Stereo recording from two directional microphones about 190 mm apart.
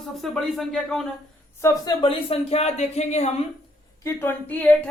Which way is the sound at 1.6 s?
20° left (ahead or behind).